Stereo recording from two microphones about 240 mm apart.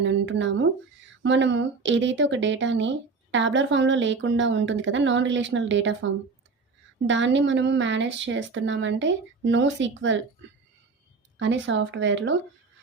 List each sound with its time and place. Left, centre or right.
0.0 s a woman's voice: right
7.1 s a woman's voice: right
11.3 s a woman's voice: right